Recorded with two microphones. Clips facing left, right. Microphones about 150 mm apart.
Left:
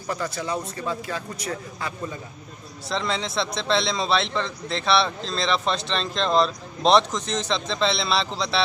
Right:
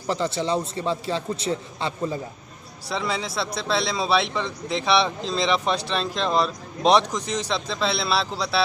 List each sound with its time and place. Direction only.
0.1 s a man's voice: 25° right (ahead or behind)
2.9 s a man's voice: 10° right (ahead or behind)